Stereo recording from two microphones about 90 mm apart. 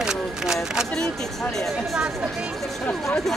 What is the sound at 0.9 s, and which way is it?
Speech, 5° left (ahead or behind).